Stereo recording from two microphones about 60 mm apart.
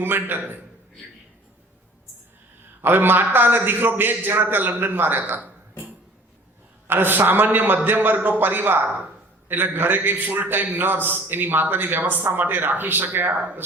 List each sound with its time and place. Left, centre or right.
0.0 s a man's voice: right
2.8 s a man's voice: right
6.8 s a man's voice: right